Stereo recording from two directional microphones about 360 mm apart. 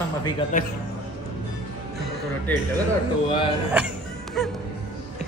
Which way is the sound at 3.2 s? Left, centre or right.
Centre.